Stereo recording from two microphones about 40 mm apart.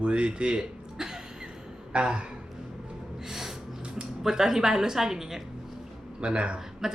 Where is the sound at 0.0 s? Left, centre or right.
Right.